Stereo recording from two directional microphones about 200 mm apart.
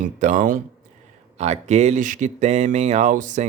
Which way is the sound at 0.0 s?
40° right (ahead or behind).